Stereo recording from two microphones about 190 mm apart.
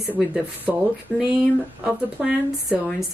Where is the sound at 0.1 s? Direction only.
10° right (ahead or behind).